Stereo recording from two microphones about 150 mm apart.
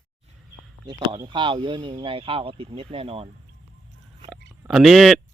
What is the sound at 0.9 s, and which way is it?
Speech, 30° right (ahead or behind).